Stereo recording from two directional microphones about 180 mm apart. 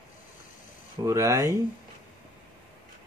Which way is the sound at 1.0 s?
15° right (ahead or behind).